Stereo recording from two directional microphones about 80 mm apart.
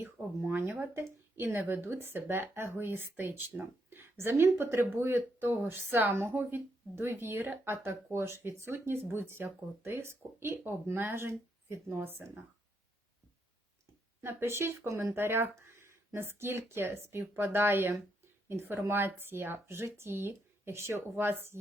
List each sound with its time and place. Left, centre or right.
0.0 s speech: right
14.2 s speech: right